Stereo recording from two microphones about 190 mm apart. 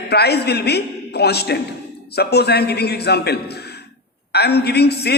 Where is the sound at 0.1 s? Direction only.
60° left (ahead or behind).